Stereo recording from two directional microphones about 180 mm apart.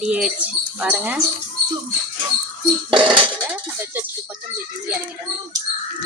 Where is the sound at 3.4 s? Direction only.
10° right (ahead or behind).